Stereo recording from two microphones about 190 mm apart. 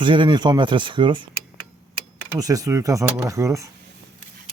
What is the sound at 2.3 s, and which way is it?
Speech, 20° right (ahead or behind).